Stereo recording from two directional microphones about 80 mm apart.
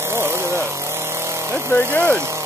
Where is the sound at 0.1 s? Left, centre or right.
Right.